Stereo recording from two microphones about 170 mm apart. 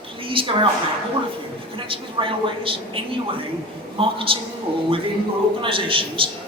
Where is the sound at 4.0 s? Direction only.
30° right (ahead or behind).